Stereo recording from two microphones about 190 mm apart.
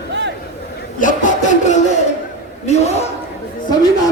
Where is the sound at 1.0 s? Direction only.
45° left (ahead or behind).